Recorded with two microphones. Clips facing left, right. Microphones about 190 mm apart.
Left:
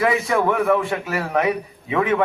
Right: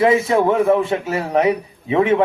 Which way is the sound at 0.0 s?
25° right (ahead or behind).